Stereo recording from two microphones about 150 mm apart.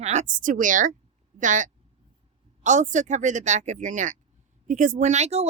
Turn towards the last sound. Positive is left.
turn(degrees=-45)  # may be behind; listen again after turning